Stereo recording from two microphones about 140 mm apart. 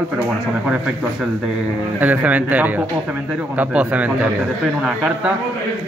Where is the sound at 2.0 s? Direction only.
10° right (ahead or behind).